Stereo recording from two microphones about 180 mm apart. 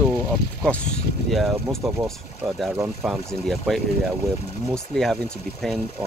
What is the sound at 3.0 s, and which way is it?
Speech, centre (ahead or behind).